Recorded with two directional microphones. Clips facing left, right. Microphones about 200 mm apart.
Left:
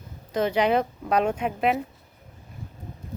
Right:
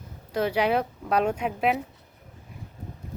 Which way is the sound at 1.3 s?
5° left (ahead or behind).